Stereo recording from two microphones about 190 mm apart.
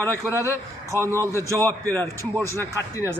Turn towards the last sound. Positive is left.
turn(degrees=15)  # may be behind; listen again after turning